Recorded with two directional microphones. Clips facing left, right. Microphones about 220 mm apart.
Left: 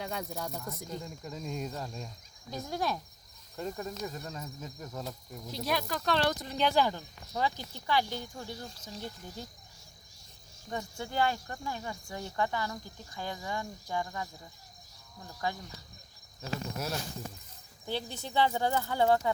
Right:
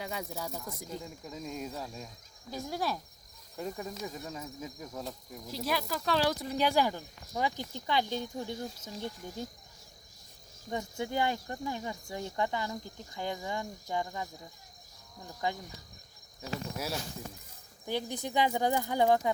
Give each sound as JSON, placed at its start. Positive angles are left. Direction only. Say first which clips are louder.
{"t": 0.0, "sound": "speech", "louder": "left 1 dB", "side_deg": -5}
{"t": 10.7, "sound": "speech", "louder": "right 3 dB", "side_deg": -20}
{"t": 15.3, "sound": "speech", "louder": "right 1 dB", "side_deg": -20}
{"t": 16.7, "sound": "speech", "louder": "even", "side_deg": -10}